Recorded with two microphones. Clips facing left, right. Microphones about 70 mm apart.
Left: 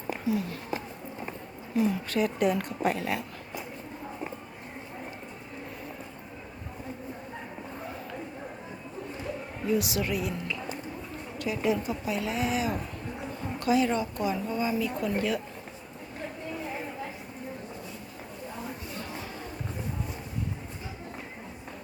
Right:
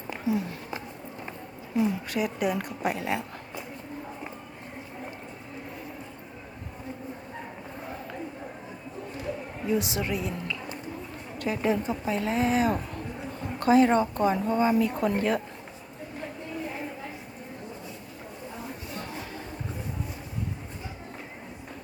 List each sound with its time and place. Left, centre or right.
0.3 s a woman's voice: right
1.7 s speech: centre
3.0 s a woman's voice: right
9.6 s a woman's voice: right
11.3 s a woman's voice: right